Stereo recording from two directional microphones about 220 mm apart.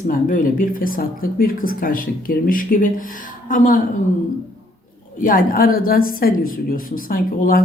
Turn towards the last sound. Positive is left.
turn(degrees=40)  # may be behind; listen again after turning